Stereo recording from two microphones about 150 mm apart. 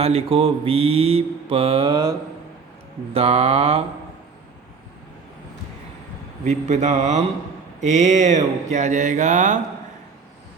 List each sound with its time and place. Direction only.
0.0 s mantra: 40° right (ahead or behind)
3.1 s mantra: 40° right (ahead or behind)
6.4 s speech: 50° right (ahead or behind)